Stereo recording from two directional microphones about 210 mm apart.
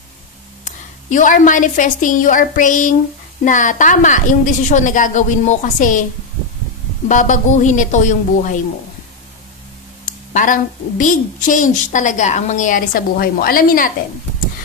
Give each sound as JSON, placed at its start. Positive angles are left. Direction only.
{"t": 0.7, "sound": "a woman's voice", "side_deg": 35}
{"t": 7.1, "sound": "a woman's voice", "side_deg": 35}
{"t": 10.0, "sound": "a woman's voice", "side_deg": 40}